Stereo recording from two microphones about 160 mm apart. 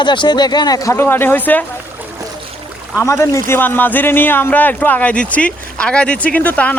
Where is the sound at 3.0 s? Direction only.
15° left (ahead or behind).